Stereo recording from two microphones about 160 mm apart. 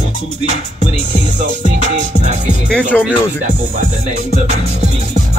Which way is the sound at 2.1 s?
50° right (ahead or behind).